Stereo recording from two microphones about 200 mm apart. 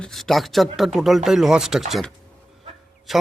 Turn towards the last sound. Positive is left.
turn(degrees=0)  # may be behind; listen again after turning